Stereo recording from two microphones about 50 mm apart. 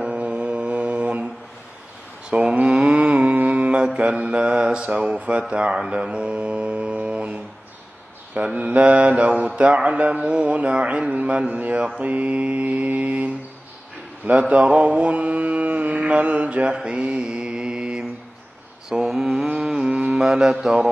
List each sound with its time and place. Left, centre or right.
0.0 s mantra: right
4.2 s speech: right
4.6 s a sound: centre
5.1 s speech: right
5.5 s mantra: centre
8.4 s speech: right
14.5 s mantra: right
19.8 s mantra: right
20.2 s a sound: centre